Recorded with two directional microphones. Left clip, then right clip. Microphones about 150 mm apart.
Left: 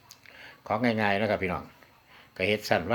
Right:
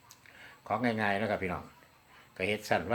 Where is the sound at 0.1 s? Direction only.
50° left (ahead or behind).